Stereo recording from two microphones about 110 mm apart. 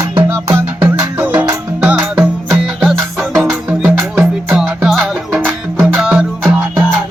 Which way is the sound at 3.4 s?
15° right (ahead or behind).